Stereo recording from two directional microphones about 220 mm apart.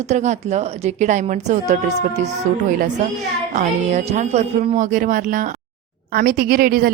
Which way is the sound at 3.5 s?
35° right (ahead or behind).